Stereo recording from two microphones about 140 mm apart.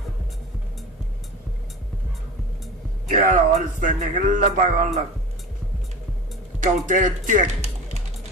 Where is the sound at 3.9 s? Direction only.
65° right (ahead or behind).